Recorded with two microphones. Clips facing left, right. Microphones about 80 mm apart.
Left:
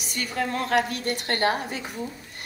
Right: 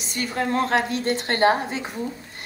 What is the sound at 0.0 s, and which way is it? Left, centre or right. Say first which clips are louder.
Speech: right 3 dB; right.